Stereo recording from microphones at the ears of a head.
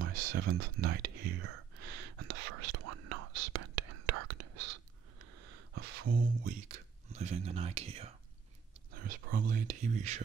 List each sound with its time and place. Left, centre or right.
0.0 s whispering: right
8.9 s speech: right